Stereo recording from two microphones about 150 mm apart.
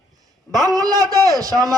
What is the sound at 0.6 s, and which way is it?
Speech, 25° right (ahead or behind).